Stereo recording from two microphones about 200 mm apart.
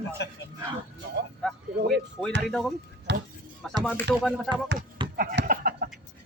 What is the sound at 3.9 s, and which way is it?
Music, centre (ahead or behind).